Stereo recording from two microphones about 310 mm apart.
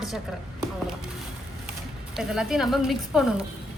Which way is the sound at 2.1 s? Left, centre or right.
Centre.